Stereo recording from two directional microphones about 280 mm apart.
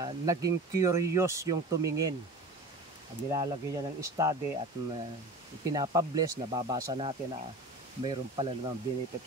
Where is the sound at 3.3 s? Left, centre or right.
Centre.